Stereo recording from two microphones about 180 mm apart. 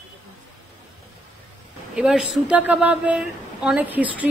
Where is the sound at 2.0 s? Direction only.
5° right (ahead or behind).